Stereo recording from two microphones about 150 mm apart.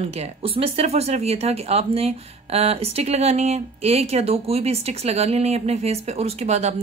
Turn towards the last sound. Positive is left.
turn(degrees=-45)  # may be behind; listen again after turning